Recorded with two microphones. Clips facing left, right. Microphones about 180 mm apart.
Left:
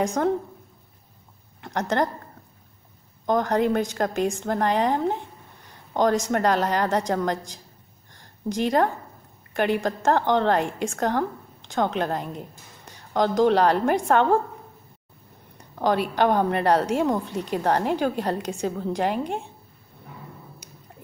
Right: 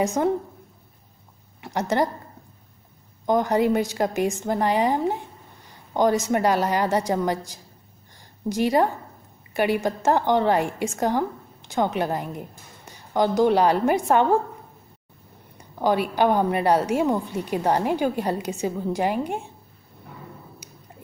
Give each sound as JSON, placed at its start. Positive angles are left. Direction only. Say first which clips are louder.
{"t": 0.0, "sound": "a woman's voice", "louder": "right 1 dB", "side_deg": -5}
{"t": 1.6, "sound": "speech", "louder": "right 1 dB", "side_deg": -10}
{"t": 3.3, "sound": "a woman's voice", "louder": "right 1 dB", "side_deg": -10}
{"t": 15.5, "sound": "a woman's voice", "louder": "right 1 dB", "side_deg": -5}